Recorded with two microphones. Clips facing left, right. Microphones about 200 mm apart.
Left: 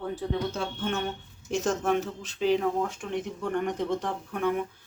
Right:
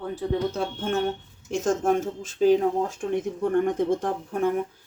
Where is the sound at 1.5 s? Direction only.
50° right (ahead or behind).